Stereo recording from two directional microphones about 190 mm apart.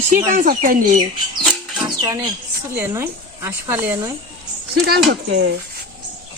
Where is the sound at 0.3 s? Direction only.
45° right (ahead or behind).